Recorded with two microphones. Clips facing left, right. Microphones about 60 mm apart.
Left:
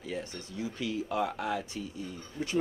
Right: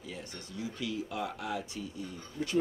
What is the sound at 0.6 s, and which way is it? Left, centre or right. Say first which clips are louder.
Speech: left 2 dB; left.